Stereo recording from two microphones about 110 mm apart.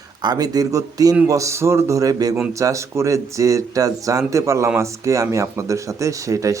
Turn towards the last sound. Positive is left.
turn(degrees=-30)  # may be behind; listen again after turning